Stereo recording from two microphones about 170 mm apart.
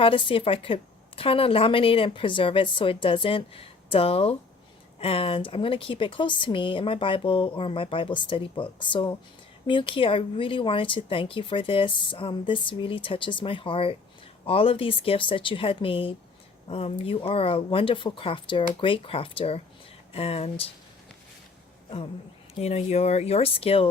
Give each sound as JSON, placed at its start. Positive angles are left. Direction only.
{"t": 0.0, "sound": "a woman's voice", "side_deg": 30}
{"t": 21.8, "sound": "a man's voice", "side_deg": 35}